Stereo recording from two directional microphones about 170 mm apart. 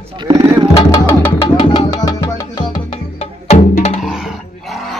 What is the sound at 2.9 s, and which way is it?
Music, 40° left (ahead or behind).